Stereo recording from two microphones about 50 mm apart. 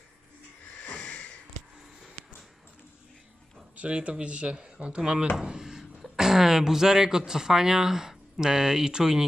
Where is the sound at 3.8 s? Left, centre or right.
Right.